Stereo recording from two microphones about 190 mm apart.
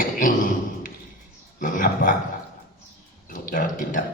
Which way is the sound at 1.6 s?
45° left (ahead or behind).